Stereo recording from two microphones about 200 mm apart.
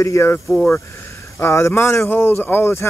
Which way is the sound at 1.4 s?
15° left (ahead or behind).